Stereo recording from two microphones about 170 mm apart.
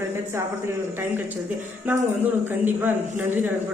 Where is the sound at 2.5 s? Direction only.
10° right (ahead or behind).